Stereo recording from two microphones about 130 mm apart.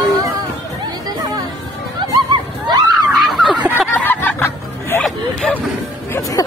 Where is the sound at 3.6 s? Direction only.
15° right (ahead or behind).